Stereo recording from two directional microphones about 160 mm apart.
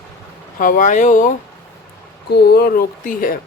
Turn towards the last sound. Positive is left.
turn(degrees=65)  # may be behind; listen again after turning